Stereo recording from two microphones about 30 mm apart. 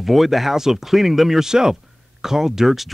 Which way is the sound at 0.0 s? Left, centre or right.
Centre.